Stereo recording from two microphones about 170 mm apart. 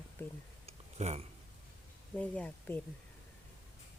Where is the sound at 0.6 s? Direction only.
40° right (ahead or behind).